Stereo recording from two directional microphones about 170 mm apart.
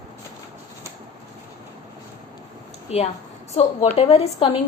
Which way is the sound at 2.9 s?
40° left (ahead or behind).